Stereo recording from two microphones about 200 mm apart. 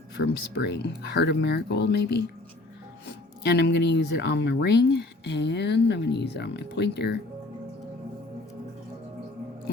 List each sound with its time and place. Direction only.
0.2 s speech: 50° left (ahead or behind)
3.4 s speech: 55° left (ahead or behind)